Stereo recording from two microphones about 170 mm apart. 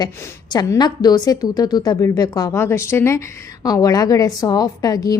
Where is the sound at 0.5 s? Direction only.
25° left (ahead or behind).